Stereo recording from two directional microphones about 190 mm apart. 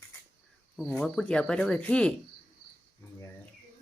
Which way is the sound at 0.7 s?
5° left (ahead or behind).